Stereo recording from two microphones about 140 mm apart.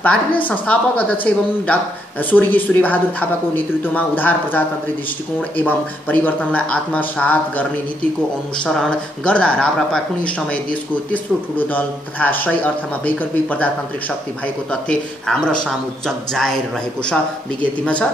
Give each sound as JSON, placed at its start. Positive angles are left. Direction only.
{"t": 0.0, "sound": "speech", "side_deg": 10}
{"t": 2.3, "sound": "speech", "side_deg": 10}
{"t": 8.6, "sound": "speech", "side_deg": 5}
{"t": 14.7, "sound": "speech", "side_deg": 5}